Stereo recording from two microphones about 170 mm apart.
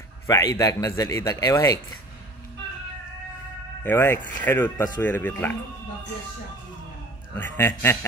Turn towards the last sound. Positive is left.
turn(degrees=15)  # may be behind; listen again after turning